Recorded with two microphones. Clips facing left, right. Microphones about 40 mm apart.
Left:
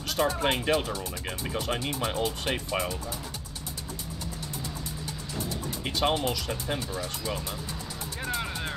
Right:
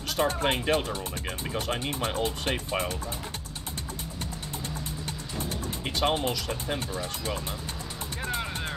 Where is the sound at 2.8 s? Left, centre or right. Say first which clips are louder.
Even; centre.